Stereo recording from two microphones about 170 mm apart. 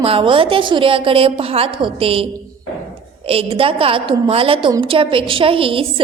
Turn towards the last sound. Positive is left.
turn(degrees=-30)  # may be behind; listen again after turning